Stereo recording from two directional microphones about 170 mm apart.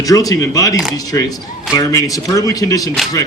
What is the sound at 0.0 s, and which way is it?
A man's voice, 20° left (ahead or behind).